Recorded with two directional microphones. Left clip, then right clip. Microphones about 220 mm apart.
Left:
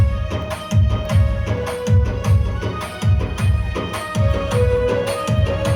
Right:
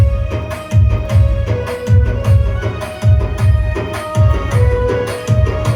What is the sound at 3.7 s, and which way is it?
Music, 40° left (ahead or behind).